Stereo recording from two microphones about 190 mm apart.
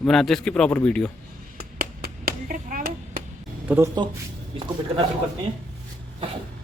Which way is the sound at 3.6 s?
10° right (ahead or behind).